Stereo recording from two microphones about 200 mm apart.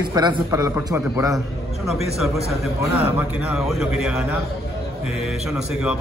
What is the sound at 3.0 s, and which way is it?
A man's voice, 10° right (ahead or behind).